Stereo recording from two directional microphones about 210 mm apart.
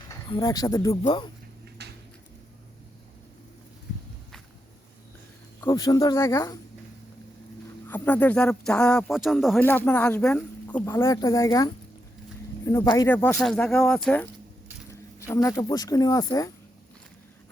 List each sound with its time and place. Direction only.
0.1 s speech: 15° left (ahead or behind)
1.8 s a sound: 55° right (ahead or behind)
5.5 s speech: 15° left (ahead or behind)
7.9 s speech: 10° left (ahead or behind)